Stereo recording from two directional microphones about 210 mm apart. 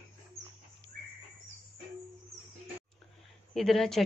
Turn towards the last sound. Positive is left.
turn(degrees=0)  # may be behind; listen again after turning